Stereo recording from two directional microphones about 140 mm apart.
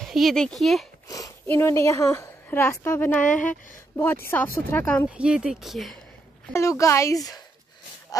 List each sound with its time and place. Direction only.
0.0 s speech: centre (ahead or behind)
1.0 s a woman's voice: 25° left (ahead or behind)
5.1 s speech: 5° right (ahead or behind)
6.5 s speech: 20° left (ahead or behind)